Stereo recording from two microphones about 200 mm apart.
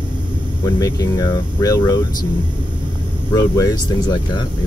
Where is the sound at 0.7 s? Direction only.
15° left (ahead or behind).